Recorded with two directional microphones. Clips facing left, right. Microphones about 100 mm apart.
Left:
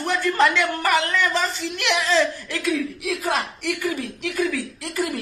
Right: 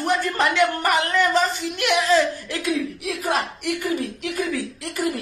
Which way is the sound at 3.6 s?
20° right (ahead or behind).